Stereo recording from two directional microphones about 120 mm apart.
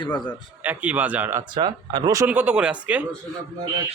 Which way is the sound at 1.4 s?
40° right (ahead or behind).